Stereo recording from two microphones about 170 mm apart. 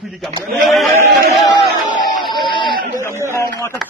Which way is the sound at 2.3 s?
25° left (ahead or behind).